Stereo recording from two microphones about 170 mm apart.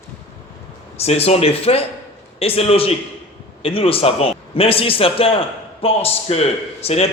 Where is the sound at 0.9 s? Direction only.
35° left (ahead or behind).